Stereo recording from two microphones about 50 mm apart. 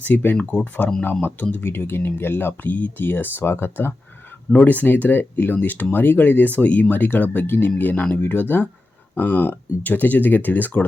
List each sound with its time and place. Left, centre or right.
0.0 s speech: left
1.6 s speech: left
4.5 s speech: left